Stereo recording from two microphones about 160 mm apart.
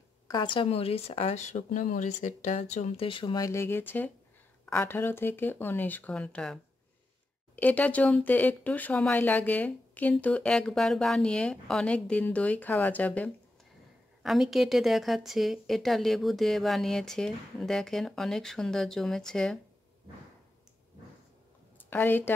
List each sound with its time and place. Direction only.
0.3 s speech: 30° left (ahead or behind); by 19.6 s 5° left (ahead or behind)
21.8 s a woman's voice: 10° left (ahead or behind)